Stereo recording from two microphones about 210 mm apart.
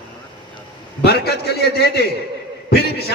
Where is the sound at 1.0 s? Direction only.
50° left (ahead or behind).